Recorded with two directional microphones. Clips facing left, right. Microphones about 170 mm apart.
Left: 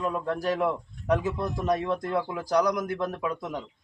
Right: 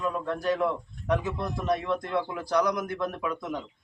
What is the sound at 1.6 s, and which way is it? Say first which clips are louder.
A man's voice: left 1 dB; 40° left (ahead or behind).